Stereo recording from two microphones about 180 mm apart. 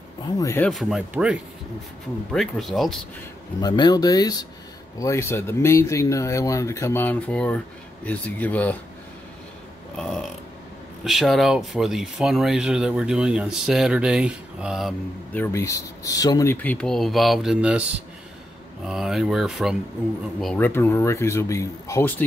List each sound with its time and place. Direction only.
0.4 s speech: 15° left (ahead or behind)
0.7 s speech: centre (ahead or behind)
3.6 s speech: 20° left (ahead or behind)
9.9 s burping: 5° left (ahead or behind)
11.1 s speech: centre (ahead or behind)
15.3 s speech: 15° left (ahead or behind); by 17.8 s 5° right (ahead or behind)
18.9 s speech: 5° right (ahead or behind); by 22.1 s 15° left (ahead or behind)